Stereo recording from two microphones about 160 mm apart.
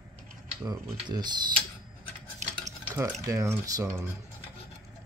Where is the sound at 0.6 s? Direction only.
25° right (ahead or behind).